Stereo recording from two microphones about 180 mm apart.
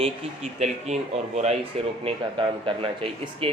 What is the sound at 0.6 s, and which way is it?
Speech, 40° right (ahead or behind).